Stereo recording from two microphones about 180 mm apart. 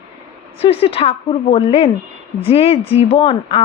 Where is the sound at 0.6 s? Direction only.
30° left (ahead or behind).